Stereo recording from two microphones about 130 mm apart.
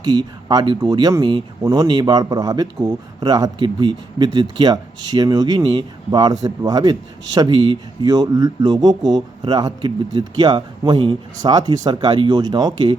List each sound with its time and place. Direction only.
0.0 s speech: 30° right (ahead or behind)